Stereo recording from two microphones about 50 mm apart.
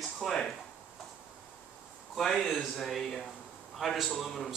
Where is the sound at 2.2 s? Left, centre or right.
Centre.